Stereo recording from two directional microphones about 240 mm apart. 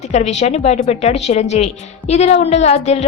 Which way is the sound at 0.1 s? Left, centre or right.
Left.